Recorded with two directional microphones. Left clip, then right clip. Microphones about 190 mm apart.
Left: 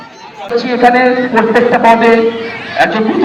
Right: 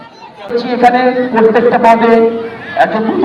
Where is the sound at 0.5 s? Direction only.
20° right (ahead or behind).